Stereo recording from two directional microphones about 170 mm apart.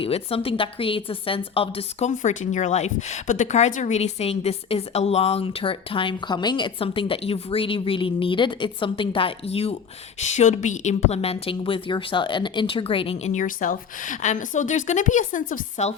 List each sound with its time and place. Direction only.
0.0 s a woman's voice: 35° left (ahead or behind)